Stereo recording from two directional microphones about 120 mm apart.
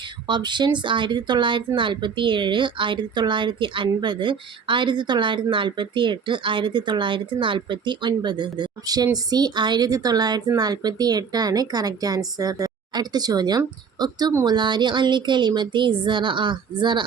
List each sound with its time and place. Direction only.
0.0 s speech: 40° right (ahead or behind)